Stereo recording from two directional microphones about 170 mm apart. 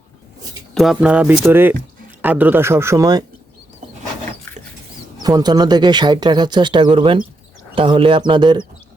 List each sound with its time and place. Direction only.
0.7 s speech: centre (ahead or behind); by 3.2 s 20° right (ahead or behind)
5.2 s speech: 25° right (ahead or behind)